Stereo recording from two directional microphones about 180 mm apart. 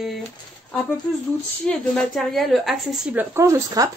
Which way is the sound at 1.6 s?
Centre (ahead or behind).